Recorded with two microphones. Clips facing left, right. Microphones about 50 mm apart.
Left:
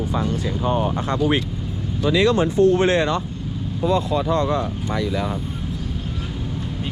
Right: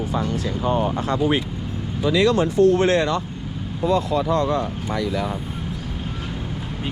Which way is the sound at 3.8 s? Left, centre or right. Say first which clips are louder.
Even; right.